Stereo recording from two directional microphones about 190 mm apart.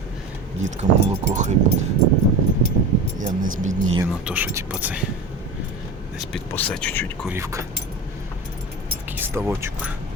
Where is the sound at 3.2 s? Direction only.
40° right (ahead or behind).